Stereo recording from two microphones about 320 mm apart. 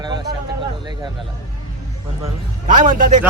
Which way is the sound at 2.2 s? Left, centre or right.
Right.